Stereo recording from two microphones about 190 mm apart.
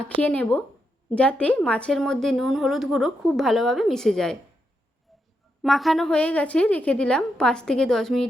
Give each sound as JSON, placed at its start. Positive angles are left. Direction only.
{"t": 0.0, "sound": "a woman's voice", "side_deg": 5}
{"t": 5.6, "sound": "a woman's voice", "side_deg": 0}